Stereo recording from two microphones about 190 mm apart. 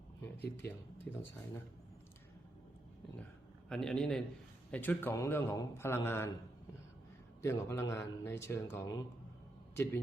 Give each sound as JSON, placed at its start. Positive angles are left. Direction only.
{"t": 0.3, "sound": "speech", "side_deg": 60}
{"t": 1.1, "sound": "speech", "side_deg": 10}
{"t": 3.7, "sound": "a man's voice", "side_deg": 5}
{"t": 7.4, "sound": "speech", "side_deg": 15}